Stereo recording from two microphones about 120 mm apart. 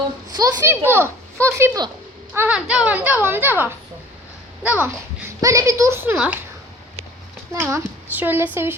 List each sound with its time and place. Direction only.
0.3 s a child's voice: 20° right (ahead or behind)
7.5 s a child's voice: 25° right (ahead or behind)